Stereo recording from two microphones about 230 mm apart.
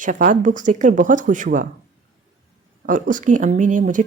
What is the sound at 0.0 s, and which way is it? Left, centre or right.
A woman's voice, right.